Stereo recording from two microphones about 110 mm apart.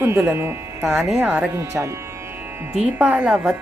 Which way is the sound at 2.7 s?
5° right (ahead or behind).